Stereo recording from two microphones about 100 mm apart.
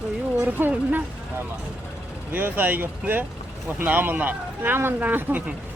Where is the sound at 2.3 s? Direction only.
20° right (ahead or behind).